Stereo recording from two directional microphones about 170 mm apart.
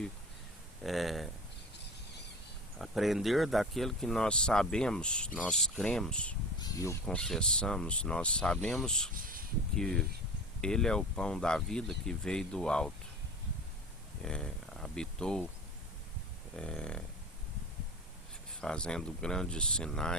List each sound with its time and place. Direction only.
0.9 s speech: centre (ahead or behind)
2.7 s speech: centre (ahead or behind)
6.6 s snake: 20° left (ahead or behind)
7.0 s speech: 5° left (ahead or behind)
14.2 s a sound: 5° left (ahead or behind)
16.6 s speech: 5° left (ahead or behind)
18.6 s speech: 5° left (ahead or behind)